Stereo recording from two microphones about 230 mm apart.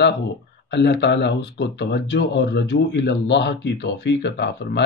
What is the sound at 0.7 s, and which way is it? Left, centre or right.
Speech, left.